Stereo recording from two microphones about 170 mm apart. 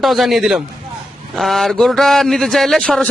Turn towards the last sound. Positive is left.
turn(degrees=5)  # may be behind; listen again after turning